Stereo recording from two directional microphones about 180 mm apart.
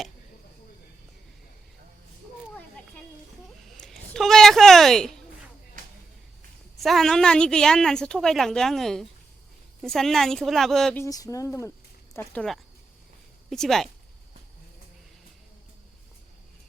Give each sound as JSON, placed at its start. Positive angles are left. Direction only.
{"t": 3.7, "sound": "a sound", "side_deg": 0}
{"t": 6.8, "sound": "a woman's voice", "side_deg": 0}
{"t": 11.0, "sound": "a woman's voice", "side_deg": 20}